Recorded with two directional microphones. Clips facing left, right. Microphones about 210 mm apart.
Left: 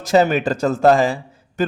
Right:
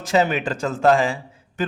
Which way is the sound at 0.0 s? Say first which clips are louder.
Left 4 dB; 40° left (ahead or behind).